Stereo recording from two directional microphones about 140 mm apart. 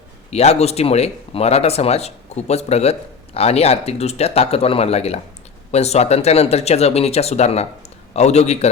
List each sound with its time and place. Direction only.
0.3 s speech: 50° left (ahead or behind)